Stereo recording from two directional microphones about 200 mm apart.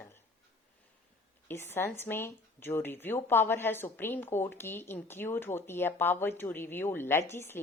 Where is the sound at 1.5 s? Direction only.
10° left (ahead or behind).